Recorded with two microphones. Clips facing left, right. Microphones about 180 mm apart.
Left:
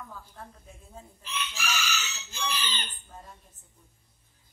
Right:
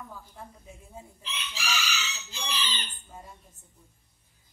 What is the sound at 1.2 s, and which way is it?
Chicken, 50° left (ahead or behind).